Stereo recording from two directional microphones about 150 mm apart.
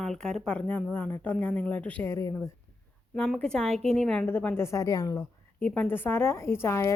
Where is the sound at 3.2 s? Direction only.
5° left (ahead or behind); by 5.2 s 25° left (ahead or behind).